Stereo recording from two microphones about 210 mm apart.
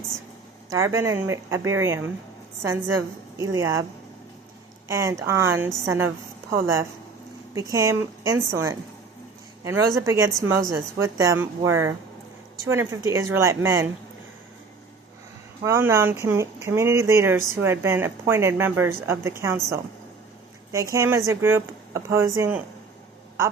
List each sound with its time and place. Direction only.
0.7 s speech: 15° right (ahead or behind)
3.3 s speech: 15° right (ahead or behind)
4.9 s speech: 15° right (ahead or behind)
15.6 s speech: 15° right (ahead or behind)
20.9 s speech: 15° right (ahead or behind)